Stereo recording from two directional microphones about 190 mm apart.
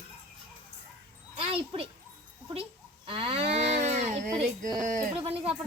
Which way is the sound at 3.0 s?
30° right (ahead or behind).